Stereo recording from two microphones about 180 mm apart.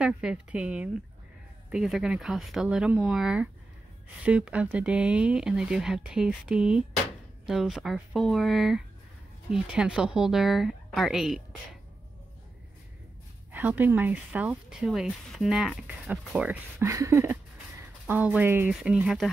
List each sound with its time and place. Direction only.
0.0 s speech: 5° right (ahead or behind)
13.5 s speech: 10° right (ahead or behind)
16.8 s speech: 15° right (ahead or behind); by 19.3 s centre (ahead or behind)